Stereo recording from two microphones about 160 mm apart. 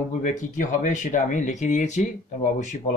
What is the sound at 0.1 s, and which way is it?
Speech, 50° left (ahead or behind).